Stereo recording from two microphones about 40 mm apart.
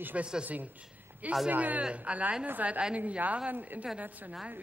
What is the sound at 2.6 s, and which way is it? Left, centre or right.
Speech, right.